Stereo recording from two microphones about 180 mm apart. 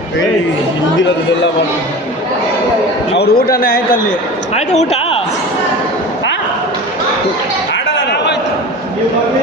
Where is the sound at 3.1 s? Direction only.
60° left (ahead or behind).